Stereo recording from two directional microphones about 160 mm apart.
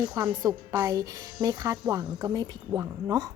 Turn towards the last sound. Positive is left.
turn(degrees=-20)  # may be behind; listen again after turning